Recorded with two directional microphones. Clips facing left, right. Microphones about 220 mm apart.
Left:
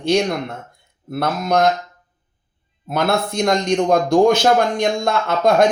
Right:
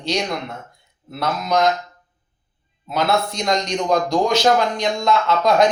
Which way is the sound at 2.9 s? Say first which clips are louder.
Left 1 dB; 50° left (ahead or behind).